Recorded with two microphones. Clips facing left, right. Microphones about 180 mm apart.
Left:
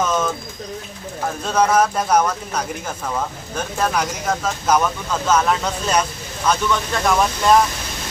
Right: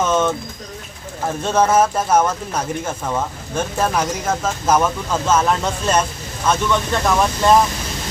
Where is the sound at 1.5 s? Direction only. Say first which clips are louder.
Right 1 dB; 5° right (ahead or behind).